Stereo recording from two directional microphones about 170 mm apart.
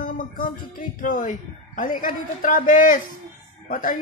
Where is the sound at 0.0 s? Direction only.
55° left (ahead or behind).